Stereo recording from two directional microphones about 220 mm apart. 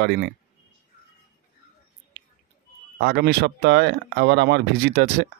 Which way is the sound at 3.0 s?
50° right (ahead or behind).